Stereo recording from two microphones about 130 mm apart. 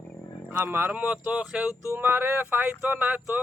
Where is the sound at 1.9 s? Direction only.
15° right (ahead or behind).